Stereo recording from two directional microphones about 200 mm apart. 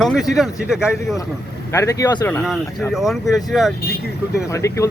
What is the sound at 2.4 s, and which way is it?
Speech, centre (ahead or behind).